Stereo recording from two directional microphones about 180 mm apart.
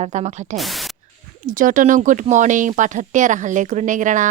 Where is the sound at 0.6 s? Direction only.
Centre (ahead or behind).